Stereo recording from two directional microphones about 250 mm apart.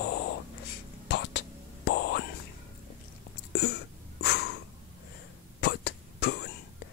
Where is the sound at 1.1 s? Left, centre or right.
Left.